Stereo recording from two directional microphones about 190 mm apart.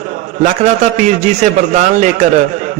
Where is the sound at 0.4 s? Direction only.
40° right (ahead or behind).